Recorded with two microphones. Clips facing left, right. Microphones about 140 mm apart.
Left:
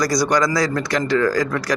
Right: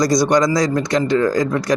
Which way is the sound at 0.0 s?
20° right (ahead or behind).